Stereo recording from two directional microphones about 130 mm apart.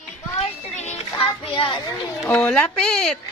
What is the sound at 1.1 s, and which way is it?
Child singing, 45° left (ahead or behind).